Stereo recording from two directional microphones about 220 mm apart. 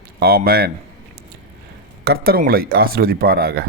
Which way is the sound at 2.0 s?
45° right (ahead or behind).